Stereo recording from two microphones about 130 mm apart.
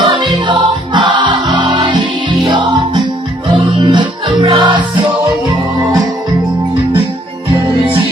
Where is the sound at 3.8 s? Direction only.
35° right (ahead or behind).